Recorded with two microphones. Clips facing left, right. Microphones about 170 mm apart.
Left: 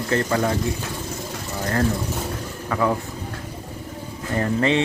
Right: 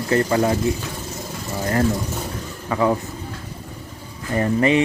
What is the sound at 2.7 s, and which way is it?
Speech, 15° right (ahead or behind).